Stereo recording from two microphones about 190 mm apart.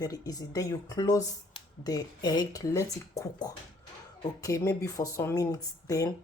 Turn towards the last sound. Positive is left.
turn(degrees=20)  # may be behind; listen again after turning